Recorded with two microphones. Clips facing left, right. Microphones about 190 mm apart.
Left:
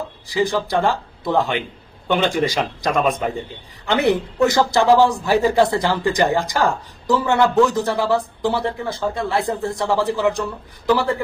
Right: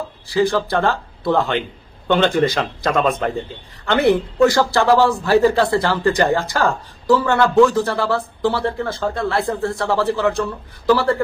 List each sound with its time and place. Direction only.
0.3 s speech: 15° left (ahead or behind)